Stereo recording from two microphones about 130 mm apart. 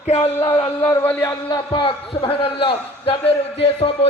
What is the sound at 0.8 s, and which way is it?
A man's voice, 25° left (ahead or behind).